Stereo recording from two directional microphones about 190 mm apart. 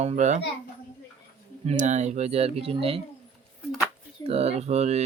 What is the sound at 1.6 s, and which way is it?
Speech, 35° right (ahead or behind).